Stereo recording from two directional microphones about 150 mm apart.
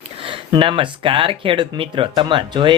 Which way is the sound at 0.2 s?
35° right (ahead or behind).